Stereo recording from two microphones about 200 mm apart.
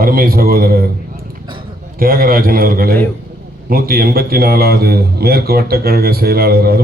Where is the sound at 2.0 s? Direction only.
45° right (ahead or behind).